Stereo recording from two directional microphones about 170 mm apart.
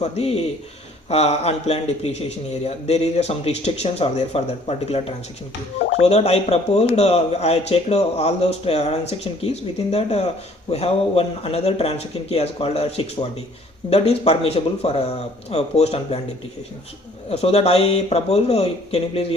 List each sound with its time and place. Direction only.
0.0 s speech: 40° left (ahead or behind)
13.9 s speech: 40° left (ahead or behind)
17.2 s speech: 35° left (ahead or behind)